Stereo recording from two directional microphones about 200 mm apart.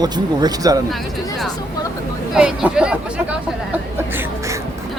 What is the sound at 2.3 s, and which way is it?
Speech, 5° right (ahead or behind).